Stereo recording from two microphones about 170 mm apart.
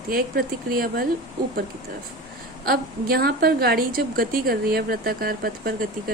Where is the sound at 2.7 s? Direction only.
65° right (ahead or behind).